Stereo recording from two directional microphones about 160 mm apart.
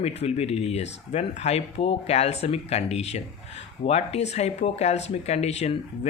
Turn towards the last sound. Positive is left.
turn(degrees=40)  # may be behind; listen again after turning